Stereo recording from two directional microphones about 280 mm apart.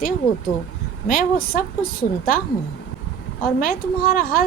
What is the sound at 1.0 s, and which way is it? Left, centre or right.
Speech, left.